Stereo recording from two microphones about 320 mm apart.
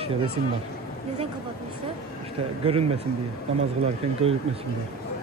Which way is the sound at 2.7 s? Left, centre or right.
Centre.